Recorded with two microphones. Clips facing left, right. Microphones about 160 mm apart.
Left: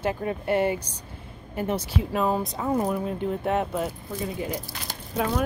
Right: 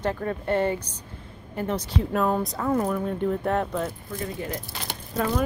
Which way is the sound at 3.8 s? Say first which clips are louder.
Left 1 dB; 15° left (ahead or behind).